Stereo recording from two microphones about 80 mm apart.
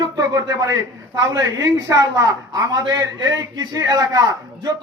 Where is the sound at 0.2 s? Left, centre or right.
Right.